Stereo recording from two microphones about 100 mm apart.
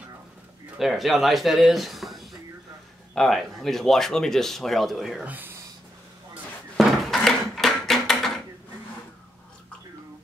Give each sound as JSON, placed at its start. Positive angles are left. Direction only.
{"t": 0.7, "sound": "speech", "side_deg": 0}
{"t": 5.2, "sound": "speech", "side_deg": -15}
{"t": 6.8, "sound": "a sound", "side_deg": 0}